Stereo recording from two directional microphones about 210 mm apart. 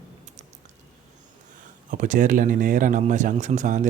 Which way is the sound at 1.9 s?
35° right (ahead or behind).